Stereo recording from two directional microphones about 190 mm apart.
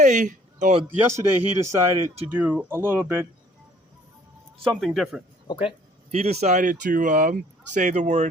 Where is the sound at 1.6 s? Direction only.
15° right (ahead or behind).